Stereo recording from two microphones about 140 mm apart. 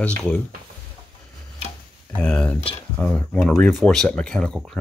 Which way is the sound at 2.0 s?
10° left (ahead or behind).